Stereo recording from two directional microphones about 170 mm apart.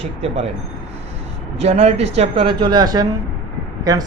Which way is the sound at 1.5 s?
40° right (ahead or behind).